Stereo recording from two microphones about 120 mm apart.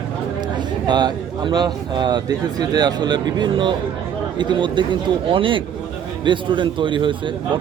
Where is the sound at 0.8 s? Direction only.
35° right (ahead or behind).